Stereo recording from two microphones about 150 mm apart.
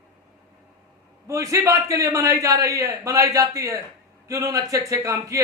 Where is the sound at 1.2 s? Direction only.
20° right (ahead or behind).